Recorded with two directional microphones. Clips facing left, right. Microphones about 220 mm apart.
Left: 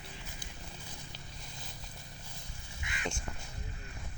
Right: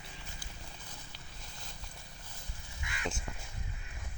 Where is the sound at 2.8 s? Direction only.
20° left (ahead or behind).